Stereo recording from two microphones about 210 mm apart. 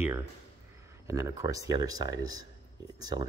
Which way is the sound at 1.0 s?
15° right (ahead or behind).